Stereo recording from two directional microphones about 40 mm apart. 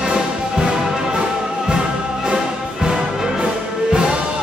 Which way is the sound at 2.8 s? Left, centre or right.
Centre.